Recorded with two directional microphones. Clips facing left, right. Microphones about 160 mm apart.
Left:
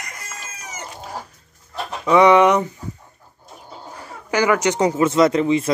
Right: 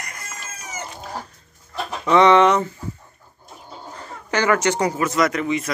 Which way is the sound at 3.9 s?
10° left (ahead or behind).